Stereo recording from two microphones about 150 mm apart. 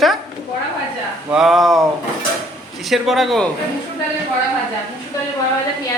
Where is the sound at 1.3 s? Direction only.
Centre (ahead or behind).